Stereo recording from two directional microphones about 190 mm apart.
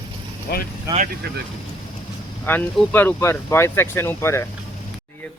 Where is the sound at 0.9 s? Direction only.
15° right (ahead or behind).